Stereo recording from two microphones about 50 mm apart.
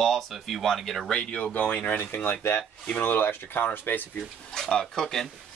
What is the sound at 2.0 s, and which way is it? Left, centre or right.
Speech, left.